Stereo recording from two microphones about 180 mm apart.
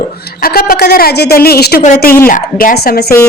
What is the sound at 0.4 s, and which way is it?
A woman's voice, 55° left (ahead or behind).